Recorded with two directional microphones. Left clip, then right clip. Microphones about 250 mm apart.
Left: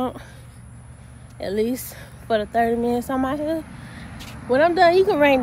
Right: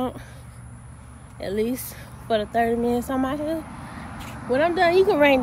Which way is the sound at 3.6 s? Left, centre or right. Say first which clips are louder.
Right 1 dB; right.